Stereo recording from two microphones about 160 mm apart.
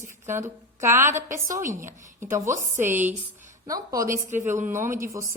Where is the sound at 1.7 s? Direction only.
55° right (ahead or behind).